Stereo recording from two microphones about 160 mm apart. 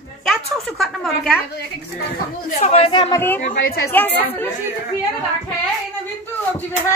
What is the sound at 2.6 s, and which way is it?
Speech, 40° left (ahead or behind).